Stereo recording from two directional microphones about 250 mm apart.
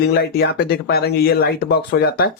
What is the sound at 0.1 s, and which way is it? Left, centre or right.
Speech, left.